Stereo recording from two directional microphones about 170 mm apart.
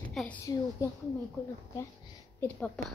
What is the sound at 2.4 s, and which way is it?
Speech, 10° left (ahead or behind).